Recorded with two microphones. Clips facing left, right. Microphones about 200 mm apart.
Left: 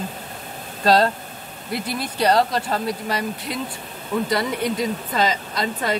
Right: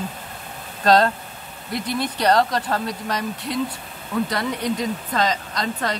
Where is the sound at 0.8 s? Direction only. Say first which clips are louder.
Even; 5° left (ahead or behind).